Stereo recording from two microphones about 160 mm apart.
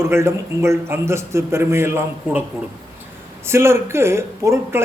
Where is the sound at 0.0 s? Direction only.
15° right (ahead or behind).